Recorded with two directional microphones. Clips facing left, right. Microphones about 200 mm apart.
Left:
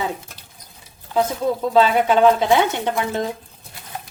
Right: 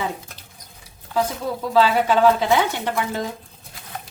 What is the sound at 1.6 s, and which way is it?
Speech, 20° left (ahead or behind).